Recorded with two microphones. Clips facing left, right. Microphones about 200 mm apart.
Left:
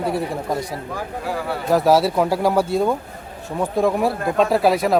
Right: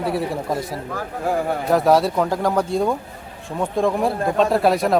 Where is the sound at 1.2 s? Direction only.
45° right (ahead or behind).